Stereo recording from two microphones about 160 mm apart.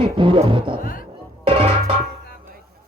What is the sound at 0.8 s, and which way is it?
Speech, 60° left (ahead or behind).